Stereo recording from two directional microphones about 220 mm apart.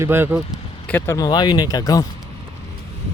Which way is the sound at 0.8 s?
10° left (ahead or behind).